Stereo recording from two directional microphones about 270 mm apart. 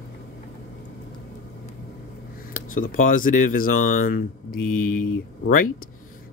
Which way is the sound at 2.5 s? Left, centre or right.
Left.